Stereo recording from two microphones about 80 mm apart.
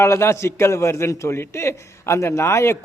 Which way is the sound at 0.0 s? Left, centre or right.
Left.